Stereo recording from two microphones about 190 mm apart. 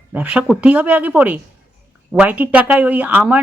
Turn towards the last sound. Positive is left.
turn(degrees=-10)  # may be behind; listen again after turning